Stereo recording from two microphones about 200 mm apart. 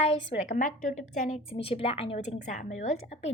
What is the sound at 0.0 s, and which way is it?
A woman's voice, 35° left (ahead or behind).